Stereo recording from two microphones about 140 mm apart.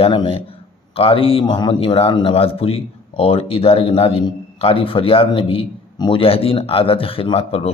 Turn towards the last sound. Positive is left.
turn(degrees=45)  # may be behind; listen again after turning